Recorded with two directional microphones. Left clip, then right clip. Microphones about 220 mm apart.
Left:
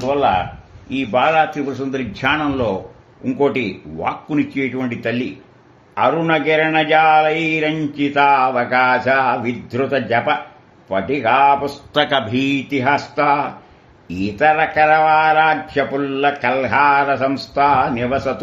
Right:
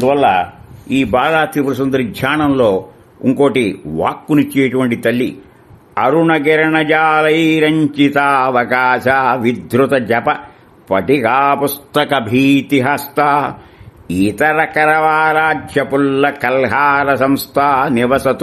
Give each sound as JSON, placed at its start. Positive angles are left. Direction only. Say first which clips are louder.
{"t": 0.0, "sound": "a man's voice", "louder": "right 5 dB", "side_deg": -70}
{"t": 0.8, "sound": "speech", "louder": "right 3 dB", "side_deg": -60}
{"t": 11.9, "sound": "speech", "louder": "right 1 dB", "side_deg": -35}
{"t": 12.6, "sound": "speech", "louder": "right 3 dB", "side_deg": -55}